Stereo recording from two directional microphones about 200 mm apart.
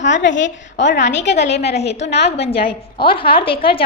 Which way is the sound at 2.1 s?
30° left (ahead or behind).